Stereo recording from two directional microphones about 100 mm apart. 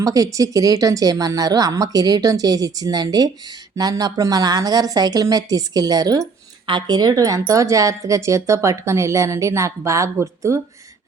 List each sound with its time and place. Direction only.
0.0 s a woman's voice: 35° right (ahead or behind)
6.7 s a woman's voice: 50° right (ahead or behind); by 10.6 s 30° right (ahead or behind)